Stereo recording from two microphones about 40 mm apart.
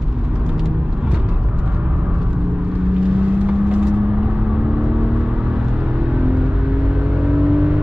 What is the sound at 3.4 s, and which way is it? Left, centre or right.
Vehicle, right.